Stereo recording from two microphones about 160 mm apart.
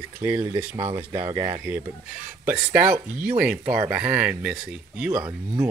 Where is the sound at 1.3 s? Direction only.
30° right (ahead or behind).